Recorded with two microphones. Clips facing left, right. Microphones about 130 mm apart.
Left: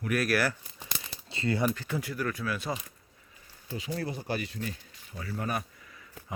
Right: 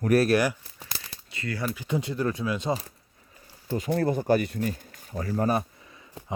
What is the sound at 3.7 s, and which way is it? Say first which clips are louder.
Speech: right 9 dB; 55° right (ahead or behind).